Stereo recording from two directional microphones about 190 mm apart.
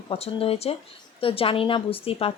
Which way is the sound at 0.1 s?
30° left (ahead or behind).